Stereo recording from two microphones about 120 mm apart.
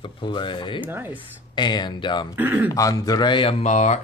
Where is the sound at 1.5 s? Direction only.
40° left (ahead or behind).